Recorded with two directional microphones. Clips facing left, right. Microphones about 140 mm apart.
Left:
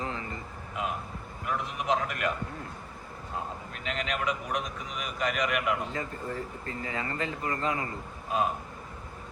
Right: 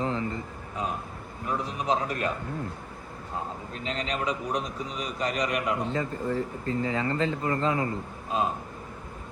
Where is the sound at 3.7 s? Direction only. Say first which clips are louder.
Right 2 dB; 30° right (ahead or behind).